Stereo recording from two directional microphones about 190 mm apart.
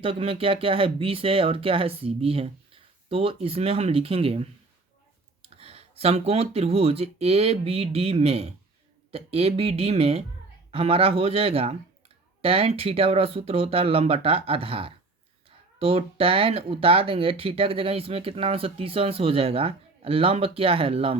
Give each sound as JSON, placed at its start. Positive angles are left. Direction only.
{"t": 0.0, "sound": "speech", "side_deg": -30}